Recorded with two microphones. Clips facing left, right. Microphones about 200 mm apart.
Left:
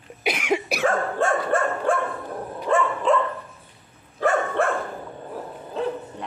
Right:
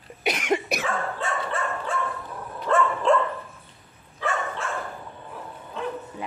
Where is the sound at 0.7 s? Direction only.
50° left (ahead or behind).